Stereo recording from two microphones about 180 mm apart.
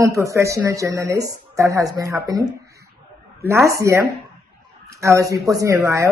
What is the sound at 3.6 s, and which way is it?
Speech, 15° right (ahead or behind).